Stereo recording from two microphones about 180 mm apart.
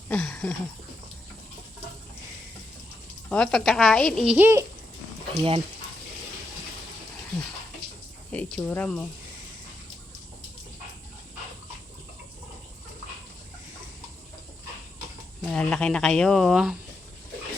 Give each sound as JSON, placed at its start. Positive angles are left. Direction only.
{"t": 0.1, "sound": "a sound", "side_deg": 5}
{"t": 3.2, "sound": "a woman's voice", "side_deg": 5}
{"t": 5.4, "sound": "speech", "side_deg": -30}
{"t": 8.3, "sound": "speech", "side_deg": 10}
{"t": 15.4, "sound": "a woman's voice", "side_deg": 5}